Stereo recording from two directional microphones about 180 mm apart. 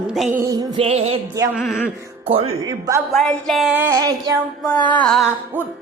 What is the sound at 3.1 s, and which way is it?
A woman's voice, centre (ahead or behind).